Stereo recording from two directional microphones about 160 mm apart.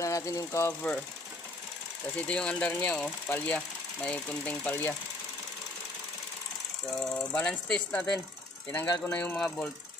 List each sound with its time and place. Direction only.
0.0 s speech: 20° left (ahead or behind)
2.1 s speech: 5° left (ahead or behind)
7.0 s speech: 5° left (ahead or behind)
8.7 s speech: 20° left (ahead or behind)